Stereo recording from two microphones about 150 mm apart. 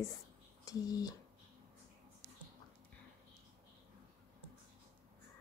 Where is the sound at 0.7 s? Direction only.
25° left (ahead or behind).